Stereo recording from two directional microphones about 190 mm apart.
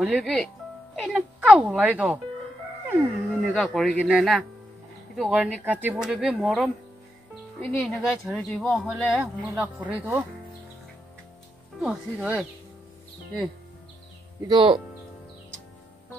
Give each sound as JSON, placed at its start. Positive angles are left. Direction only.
{"t": 0.0, "sound": "speech", "side_deg": 0}
{"t": 3.5, "sound": "speech", "side_deg": 5}
{"t": 7.8, "sound": "speech", "side_deg": 0}
{"t": 9.2, "sound": "speech", "side_deg": -15}
{"t": 11.8, "sound": "speech", "side_deg": -5}
{"t": 14.5, "sound": "speech", "side_deg": -25}